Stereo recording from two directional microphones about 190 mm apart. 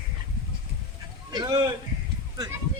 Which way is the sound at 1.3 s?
20° right (ahead or behind).